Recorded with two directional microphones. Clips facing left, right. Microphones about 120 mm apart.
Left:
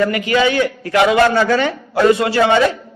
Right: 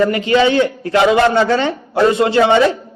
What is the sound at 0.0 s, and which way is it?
A man's voice, 25° right (ahead or behind).